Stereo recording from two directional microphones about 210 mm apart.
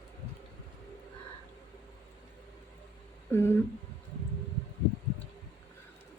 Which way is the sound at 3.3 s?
10° left (ahead or behind).